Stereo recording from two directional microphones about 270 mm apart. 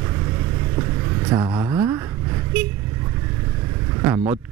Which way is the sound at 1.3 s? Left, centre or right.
Centre.